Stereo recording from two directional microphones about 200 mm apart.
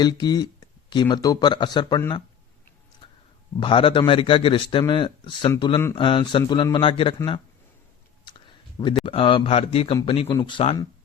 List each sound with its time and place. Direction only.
0.0 s speech: 20° left (ahead or behind)
3.6 s speech: 25° left (ahead or behind)
8.2 s a sound: 25° left (ahead or behind)
9.0 s speech: 25° left (ahead or behind)